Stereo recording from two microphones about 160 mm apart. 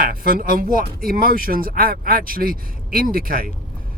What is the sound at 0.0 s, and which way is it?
Speech, 65° right (ahead or behind).